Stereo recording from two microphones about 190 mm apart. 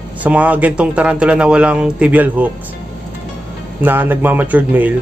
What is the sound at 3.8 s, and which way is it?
Speech, 10° right (ahead or behind).